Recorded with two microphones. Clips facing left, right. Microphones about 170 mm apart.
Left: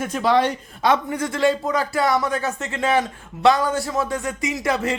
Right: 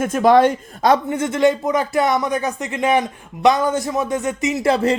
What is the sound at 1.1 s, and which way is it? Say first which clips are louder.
Speech: right 4 dB; 20° right (ahead or behind).